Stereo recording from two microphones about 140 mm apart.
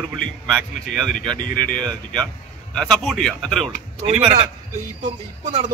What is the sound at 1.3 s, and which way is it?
Speech, 30° right (ahead or behind).